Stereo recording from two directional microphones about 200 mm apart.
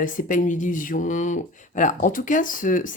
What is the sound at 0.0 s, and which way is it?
Speech, 40° left (ahead or behind).